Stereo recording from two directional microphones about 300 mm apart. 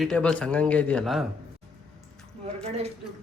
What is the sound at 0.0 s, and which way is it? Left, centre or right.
Speech, centre.